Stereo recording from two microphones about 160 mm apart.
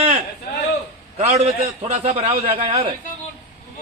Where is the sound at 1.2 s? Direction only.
45° right (ahead or behind).